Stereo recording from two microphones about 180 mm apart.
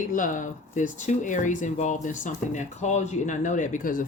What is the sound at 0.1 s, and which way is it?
Speech, 50° left (ahead or behind).